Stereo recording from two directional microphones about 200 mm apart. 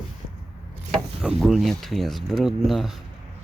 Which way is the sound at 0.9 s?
Centre (ahead or behind).